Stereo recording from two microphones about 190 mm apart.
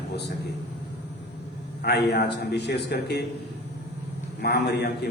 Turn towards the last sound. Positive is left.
turn(degrees=60)  # may be behind; listen again after turning